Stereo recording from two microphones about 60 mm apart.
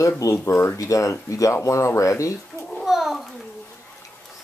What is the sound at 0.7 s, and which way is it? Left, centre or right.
Speech, left.